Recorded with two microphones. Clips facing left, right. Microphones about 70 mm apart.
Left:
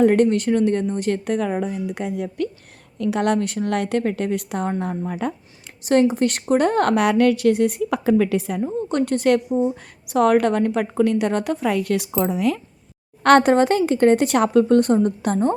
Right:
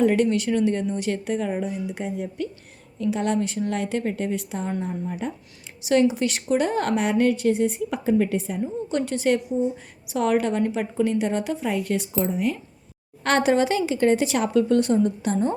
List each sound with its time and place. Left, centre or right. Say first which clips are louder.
0.0 s a woman's voice: left 4 dB; left
5.2 s speech: left 5 dB; left
8.6 s a woman's voice: left 4 dB; left
13.2 s a woman's voice: left 6 dB; left